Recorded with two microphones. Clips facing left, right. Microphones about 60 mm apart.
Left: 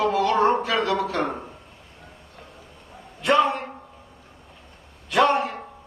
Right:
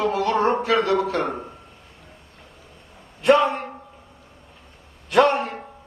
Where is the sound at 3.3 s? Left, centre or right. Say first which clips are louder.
Right 3 dB; right.